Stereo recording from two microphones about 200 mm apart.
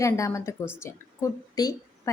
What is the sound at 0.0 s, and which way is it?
A woman's voice, 15° left (ahead or behind).